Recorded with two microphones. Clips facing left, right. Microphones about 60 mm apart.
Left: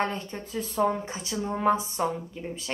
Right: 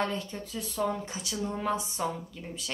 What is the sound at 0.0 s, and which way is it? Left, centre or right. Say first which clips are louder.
Speech: left 2 dB; left.